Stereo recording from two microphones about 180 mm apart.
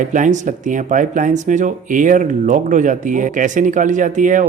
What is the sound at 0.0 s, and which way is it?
Speech, 45° right (ahead or behind).